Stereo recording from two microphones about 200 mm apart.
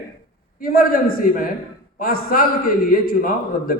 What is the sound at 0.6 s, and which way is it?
A man's voice, 45° left (ahead or behind).